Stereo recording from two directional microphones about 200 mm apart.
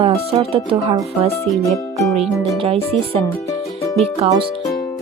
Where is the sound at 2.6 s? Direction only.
30° right (ahead or behind).